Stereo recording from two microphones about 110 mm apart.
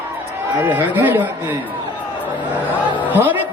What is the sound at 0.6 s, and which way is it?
Speech, 20° right (ahead or behind).